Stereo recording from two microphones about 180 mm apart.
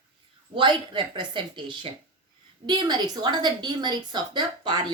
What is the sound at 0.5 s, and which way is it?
Speech, 25° right (ahead or behind).